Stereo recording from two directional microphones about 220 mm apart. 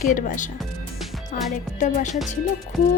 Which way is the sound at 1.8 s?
35° left (ahead or behind).